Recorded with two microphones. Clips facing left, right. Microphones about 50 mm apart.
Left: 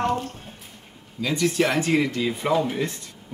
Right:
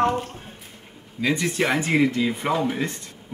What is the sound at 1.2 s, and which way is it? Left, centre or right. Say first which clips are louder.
Speech: left 1 dB; right.